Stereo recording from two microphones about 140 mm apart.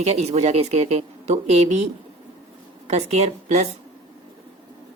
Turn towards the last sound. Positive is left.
turn(degrees=-55)  # may be behind; listen again after turning